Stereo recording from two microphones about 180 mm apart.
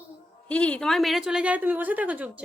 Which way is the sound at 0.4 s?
5° left (ahead or behind).